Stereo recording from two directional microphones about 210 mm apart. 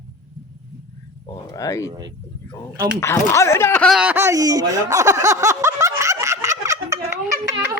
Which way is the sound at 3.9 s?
5° right (ahead or behind).